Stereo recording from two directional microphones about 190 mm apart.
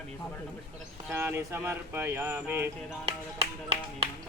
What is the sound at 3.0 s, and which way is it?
Speech, 35° right (ahead or behind).